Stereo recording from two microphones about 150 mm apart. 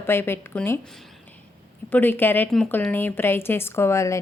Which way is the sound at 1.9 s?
15° left (ahead or behind).